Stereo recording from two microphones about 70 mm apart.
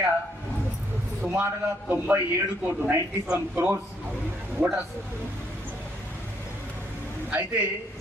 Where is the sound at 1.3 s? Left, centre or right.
Right.